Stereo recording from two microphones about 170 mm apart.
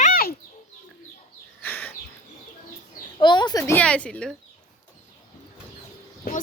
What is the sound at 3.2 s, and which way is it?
Speech, 25° left (ahead or behind).